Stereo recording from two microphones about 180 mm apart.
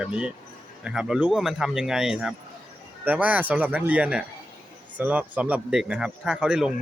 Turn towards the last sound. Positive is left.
turn(degrees=-5)  # may be behind; listen again after turning